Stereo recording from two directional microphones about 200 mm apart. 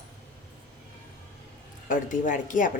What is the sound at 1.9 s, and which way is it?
Speech, 40° left (ahead or behind).